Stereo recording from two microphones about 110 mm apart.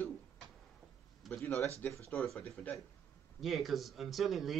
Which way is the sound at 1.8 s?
15° left (ahead or behind).